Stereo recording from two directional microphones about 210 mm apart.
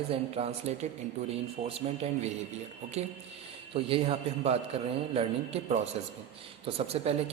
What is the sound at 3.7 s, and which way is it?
Speech, 25° right (ahead or behind).